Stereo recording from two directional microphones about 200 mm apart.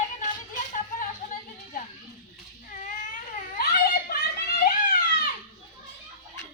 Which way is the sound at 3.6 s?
50° left (ahead or behind).